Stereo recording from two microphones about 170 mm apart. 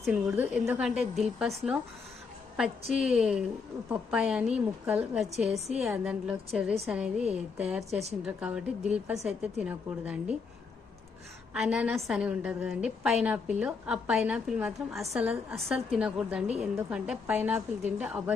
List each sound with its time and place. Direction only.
0.3 s a woman's voice: 15° right (ahead or behind)
2.9 s a woman's voice: 5° right (ahead or behind)
7.9 s a woman's voice: 40° right (ahead or behind)
8.2 s a woman's voice: 5° right (ahead or behind)
11.5 s a woman's voice: 5° right (ahead or behind)